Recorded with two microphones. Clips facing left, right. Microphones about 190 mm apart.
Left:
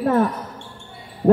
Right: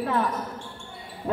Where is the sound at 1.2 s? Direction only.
45° left (ahead or behind).